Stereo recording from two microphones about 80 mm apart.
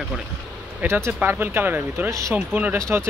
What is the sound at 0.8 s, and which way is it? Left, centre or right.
Speech, right.